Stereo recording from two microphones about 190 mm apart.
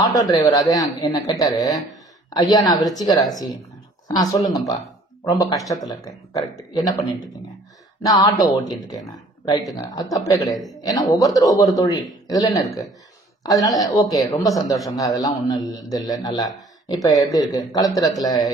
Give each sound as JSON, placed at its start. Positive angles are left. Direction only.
{"t": 0.0, "sound": "a man's voice", "side_deg": 20}
{"t": 8.0, "sound": "a man's voice", "side_deg": 20}